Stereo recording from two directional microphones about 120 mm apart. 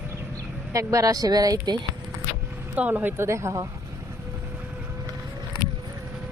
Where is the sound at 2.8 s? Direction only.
15° right (ahead or behind).